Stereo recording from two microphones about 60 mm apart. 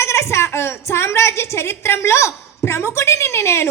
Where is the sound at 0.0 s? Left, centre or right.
Left.